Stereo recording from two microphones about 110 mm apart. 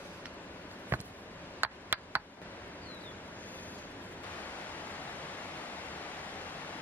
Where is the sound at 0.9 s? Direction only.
15° right (ahead or behind).